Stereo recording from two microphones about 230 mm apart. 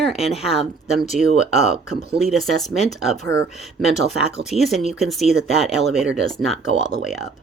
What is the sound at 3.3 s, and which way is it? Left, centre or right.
Speech, centre.